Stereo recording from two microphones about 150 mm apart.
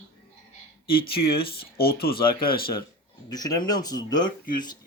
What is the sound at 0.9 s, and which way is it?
Speech, 90° left.